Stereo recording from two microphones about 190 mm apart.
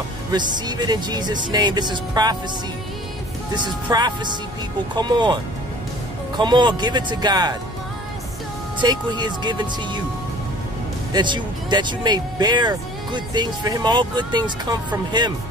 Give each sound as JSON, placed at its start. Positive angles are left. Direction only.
{"t": 0.3, "sound": "speech", "side_deg": -20}
{"t": 3.5, "sound": "speech", "side_deg": -20}
{"t": 8.8, "sound": "speech", "side_deg": -25}
{"t": 11.1, "sound": "speech", "side_deg": -25}